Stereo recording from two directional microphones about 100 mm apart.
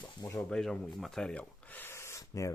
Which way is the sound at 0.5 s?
5° left (ahead or behind).